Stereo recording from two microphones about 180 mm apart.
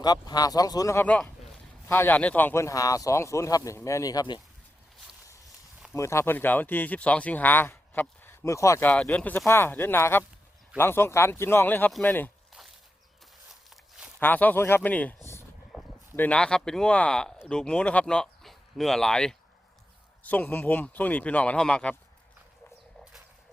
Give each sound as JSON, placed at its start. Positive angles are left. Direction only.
{"t": 0.0, "sound": "speech", "side_deg": 20}
{"t": 5.9, "sound": "speech", "side_deg": 15}
{"t": 14.2, "sound": "speech", "side_deg": 10}
{"t": 15.7, "sound": "a sound", "side_deg": 0}
{"t": 16.1, "sound": "speech", "side_deg": 10}